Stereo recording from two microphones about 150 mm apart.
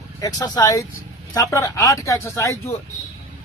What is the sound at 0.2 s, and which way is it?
Speech, 25° left (ahead or behind).